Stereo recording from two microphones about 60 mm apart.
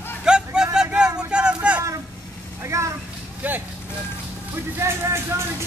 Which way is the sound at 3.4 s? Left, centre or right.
Right.